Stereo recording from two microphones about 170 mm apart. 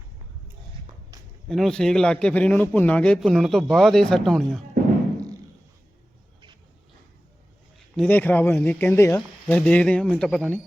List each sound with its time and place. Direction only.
1.1 s a sound: 20° right (ahead or behind)
1.5 s a man's voice: centre (ahead or behind)
7.9 s speech: 10° left (ahead or behind)